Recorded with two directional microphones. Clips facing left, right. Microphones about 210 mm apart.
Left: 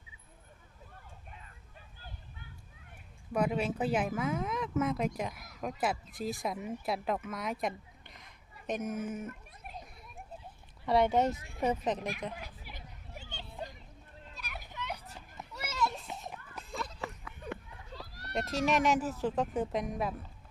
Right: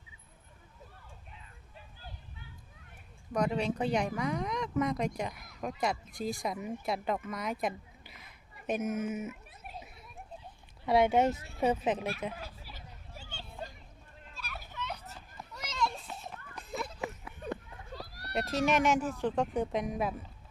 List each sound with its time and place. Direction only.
3.3 s speech: 5° left (ahead or behind)
12.4 s a sound: 15° left (ahead or behind)
14.3 s children playing: 15° left (ahead or behind)
16.0 s children playing: 15° left (ahead or behind)
16.8 s a sound: 25° right (ahead or behind)
17.5 s children playing: 35° right (ahead or behind)
18.3 s speech: centre (ahead or behind)